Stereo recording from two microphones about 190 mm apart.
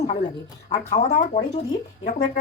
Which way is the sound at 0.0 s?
35° left (ahead or behind).